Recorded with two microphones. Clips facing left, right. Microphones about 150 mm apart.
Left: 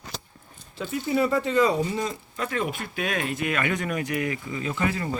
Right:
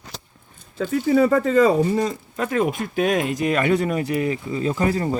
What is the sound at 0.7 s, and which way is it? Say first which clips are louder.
Speech: right 7 dB; 45° right (ahead or behind).